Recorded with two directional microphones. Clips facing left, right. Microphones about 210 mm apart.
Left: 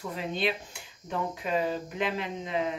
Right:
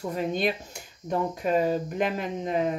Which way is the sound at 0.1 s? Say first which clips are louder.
Right 4 dB; 45° right (ahead or behind).